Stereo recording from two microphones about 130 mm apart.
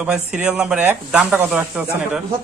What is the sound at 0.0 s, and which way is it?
Speech, 5° right (ahead or behind).